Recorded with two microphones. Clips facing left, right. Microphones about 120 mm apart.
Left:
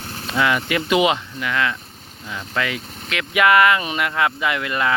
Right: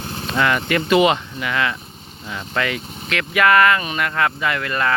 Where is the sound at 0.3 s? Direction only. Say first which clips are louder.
Right 1 dB; 5° left (ahead or behind).